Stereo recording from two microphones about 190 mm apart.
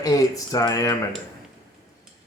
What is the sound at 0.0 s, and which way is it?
Speech, 20° left (ahead or behind).